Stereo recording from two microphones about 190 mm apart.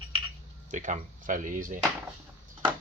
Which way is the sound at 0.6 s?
40° right (ahead or behind).